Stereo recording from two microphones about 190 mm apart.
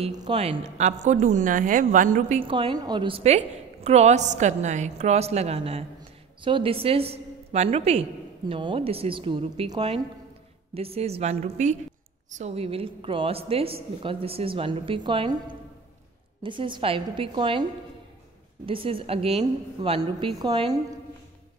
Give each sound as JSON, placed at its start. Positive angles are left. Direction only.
{"t": 0.3, "sound": "a woman's voice", "side_deg": -30}
{"t": 2.5, "sound": "a woman's voice", "side_deg": -25}
{"t": 18.7, "sound": "a woman's voice", "side_deg": -30}